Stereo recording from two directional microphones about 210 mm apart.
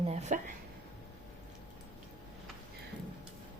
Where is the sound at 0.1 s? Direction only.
35° right (ahead or behind).